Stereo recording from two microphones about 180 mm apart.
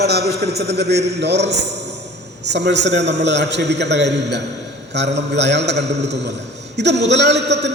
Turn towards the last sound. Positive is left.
turn(degrees=-70)  # may be behind; listen again after turning